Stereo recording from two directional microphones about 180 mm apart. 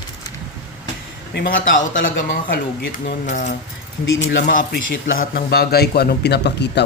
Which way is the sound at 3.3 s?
45° left (ahead or behind).